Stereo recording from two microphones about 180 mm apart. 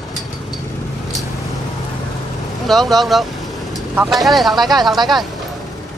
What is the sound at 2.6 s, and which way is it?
Speech, centre (ahead or behind).